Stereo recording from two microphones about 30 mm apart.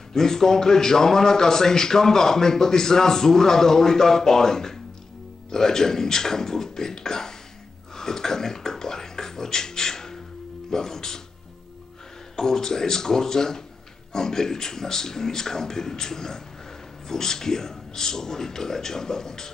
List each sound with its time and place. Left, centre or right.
0.1 s speech: centre
7.9 s beatboxing: centre
10.7 s speech: centre
12.4 s speech: centre